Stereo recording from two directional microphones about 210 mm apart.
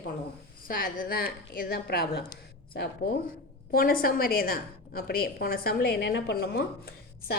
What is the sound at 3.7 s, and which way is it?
A woman's voice, 45° left (ahead or behind).